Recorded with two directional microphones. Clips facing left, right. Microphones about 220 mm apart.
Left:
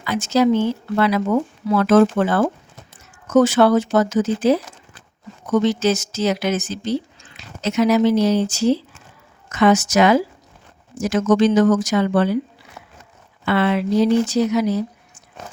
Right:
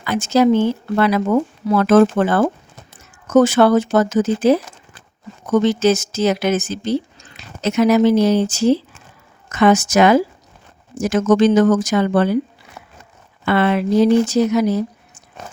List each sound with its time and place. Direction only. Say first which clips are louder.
0.0 s speech: right 2 dB; 50° right (ahead or behind)
13.4 s speech: right 2 dB; 50° right (ahead or behind)